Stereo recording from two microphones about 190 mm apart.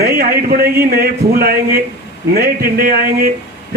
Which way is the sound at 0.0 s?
50° right (ahead or behind).